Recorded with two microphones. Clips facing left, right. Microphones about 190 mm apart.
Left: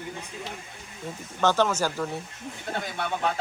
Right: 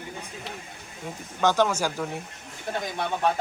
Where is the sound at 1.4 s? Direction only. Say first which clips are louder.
Even; 10° right (ahead or behind).